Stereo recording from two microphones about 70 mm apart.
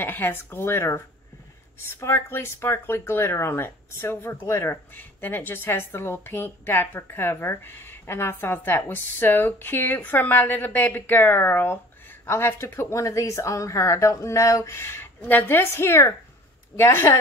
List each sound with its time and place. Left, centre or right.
0.0 s a woman's voice: left
2.0 s a woman's voice: left
4.9 s a woman's voice: left
15.2 s a woman's voice: left